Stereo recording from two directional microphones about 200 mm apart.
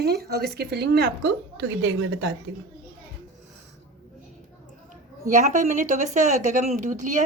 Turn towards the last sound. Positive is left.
turn(degrees=-35)  # may be behind; listen again after turning